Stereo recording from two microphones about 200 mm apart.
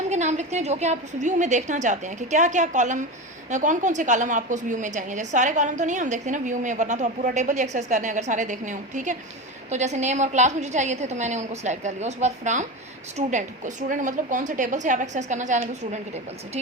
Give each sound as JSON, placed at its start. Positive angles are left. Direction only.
{"t": 0.1, "sound": "a woman's voice", "side_deg": -35}